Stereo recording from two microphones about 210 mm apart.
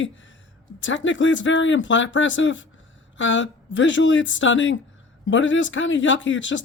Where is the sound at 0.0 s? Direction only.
65° left (ahead or behind).